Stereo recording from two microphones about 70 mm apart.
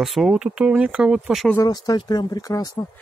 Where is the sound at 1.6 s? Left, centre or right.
Left.